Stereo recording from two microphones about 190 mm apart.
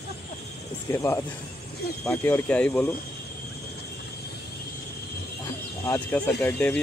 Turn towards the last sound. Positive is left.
turn(degrees=10)  # may be behind; listen again after turning